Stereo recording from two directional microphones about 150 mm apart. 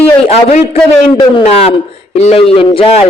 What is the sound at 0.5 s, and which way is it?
A man's voice, 40° left (ahead or behind).